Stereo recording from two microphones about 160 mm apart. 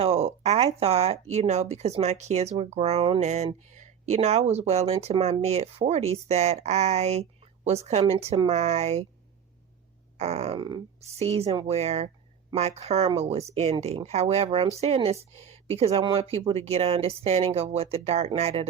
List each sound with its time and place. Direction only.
0.0 s speech: 40° right (ahead or behind)
10.2 s speech: 40° right (ahead or behind)